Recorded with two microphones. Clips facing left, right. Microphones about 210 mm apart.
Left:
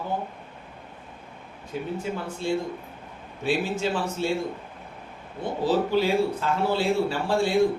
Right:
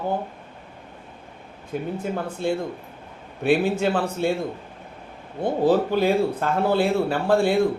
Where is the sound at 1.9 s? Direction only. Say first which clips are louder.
Right 3 dB; 55° right (ahead or behind).